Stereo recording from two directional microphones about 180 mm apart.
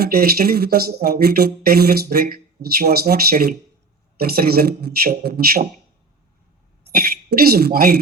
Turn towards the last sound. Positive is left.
turn(degrees=-55)  # may be behind; listen again after turning